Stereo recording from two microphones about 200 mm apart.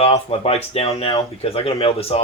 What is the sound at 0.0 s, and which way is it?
A man's voice, 30° left (ahead or behind).